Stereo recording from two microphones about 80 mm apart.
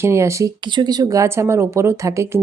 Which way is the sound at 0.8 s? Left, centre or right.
Right.